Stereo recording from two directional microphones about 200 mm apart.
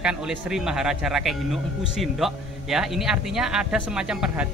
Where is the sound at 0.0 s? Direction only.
5° right (ahead or behind).